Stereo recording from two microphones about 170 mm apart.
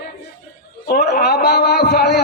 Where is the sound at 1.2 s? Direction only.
70° left (ahead or behind).